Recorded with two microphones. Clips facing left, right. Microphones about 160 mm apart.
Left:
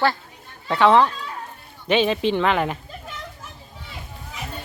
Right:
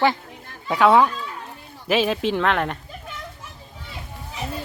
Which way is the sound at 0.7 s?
5° right (ahead or behind).